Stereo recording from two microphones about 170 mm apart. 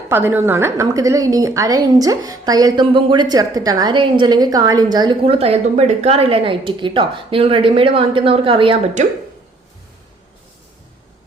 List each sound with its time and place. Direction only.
0.1 s a woman's voice: 15° right (ahead or behind); by 8.8 s 30° right (ahead or behind)